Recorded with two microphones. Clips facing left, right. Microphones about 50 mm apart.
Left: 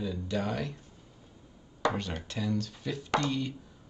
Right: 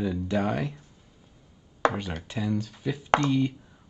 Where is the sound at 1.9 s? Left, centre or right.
Centre.